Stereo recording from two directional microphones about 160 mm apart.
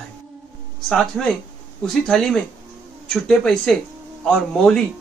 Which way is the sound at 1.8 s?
5° left (ahead or behind).